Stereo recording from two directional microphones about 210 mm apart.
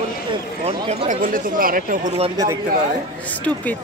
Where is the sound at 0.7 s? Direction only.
30° right (ahead or behind).